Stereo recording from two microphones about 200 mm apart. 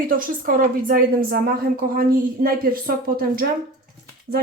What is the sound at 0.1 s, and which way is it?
A woman's voice, 45° right (ahead or behind).